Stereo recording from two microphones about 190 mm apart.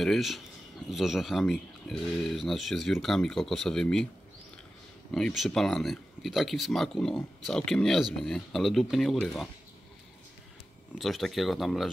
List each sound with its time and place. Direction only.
0.0 s speech: centre (ahead or behind)
5.1 s speech: centre (ahead or behind)
11.0 s speech: centre (ahead or behind)